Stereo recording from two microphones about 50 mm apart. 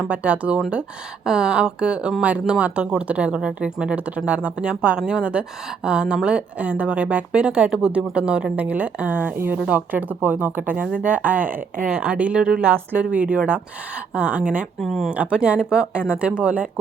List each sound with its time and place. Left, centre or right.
0.1 s a woman's voice: right
1.2 s a woman's voice: centre
4.7 s a woman's voice: centre
12.6 s speech: right
13.0 s a woman's voice: right
14.8 s speech: centre
15.1 s a woman's voice: right